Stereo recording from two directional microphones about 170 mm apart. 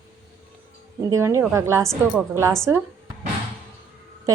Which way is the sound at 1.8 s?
5° left (ahead or behind).